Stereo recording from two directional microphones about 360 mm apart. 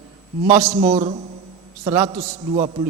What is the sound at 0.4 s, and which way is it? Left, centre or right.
A man's voice, centre.